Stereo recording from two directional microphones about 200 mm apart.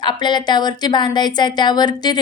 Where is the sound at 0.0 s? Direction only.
20° left (ahead or behind).